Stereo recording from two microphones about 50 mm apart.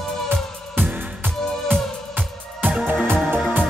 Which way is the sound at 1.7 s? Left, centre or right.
Right.